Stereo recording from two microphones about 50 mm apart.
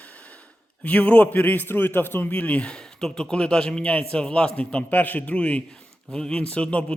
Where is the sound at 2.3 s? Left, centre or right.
Left.